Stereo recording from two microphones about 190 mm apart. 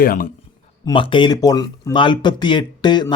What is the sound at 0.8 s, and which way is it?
Speech, 25° left (ahead or behind).